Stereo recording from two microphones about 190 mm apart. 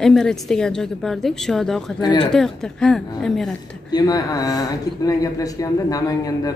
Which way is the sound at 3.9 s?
20° left (ahead or behind).